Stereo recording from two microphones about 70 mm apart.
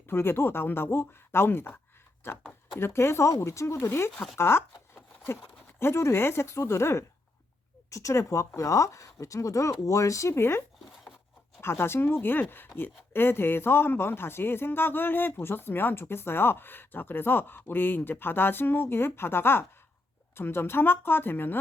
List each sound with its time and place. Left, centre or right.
0.1 s speech: left
5.8 s speech: left
11.6 s speech: left